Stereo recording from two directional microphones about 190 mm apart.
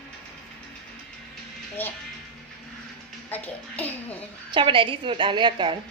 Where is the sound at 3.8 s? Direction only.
10° left (ahead or behind).